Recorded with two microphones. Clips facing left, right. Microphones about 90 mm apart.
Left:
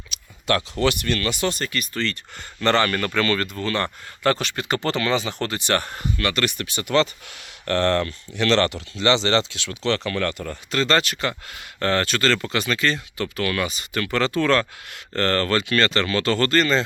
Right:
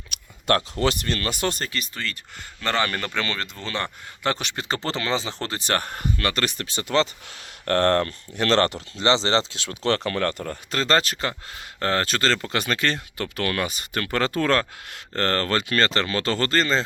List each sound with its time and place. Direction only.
0.1 s speech: 45° right (ahead or behind); by 2.0 s 25° right (ahead or behind)
2.6 s speech: 10° right (ahead or behind); by 6.1 s 45° right (ahead or behind)
6.1 s speech: 35° right (ahead or behind)
7.6 s speech: 45° right (ahead or behind)